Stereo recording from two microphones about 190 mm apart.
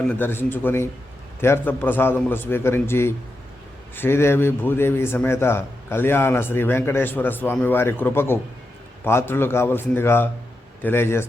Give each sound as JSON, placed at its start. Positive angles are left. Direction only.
{"t": 0.1, "sound": "a man's voice", "side_deg": 10}